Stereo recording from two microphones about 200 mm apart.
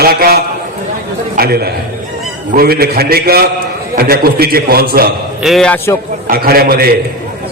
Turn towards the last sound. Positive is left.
turn(degrees=-50)  # may be behind; listen again after turning